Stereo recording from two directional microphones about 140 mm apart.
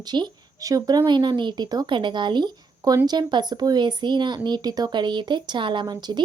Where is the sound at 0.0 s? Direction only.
30° right (ahead or behind).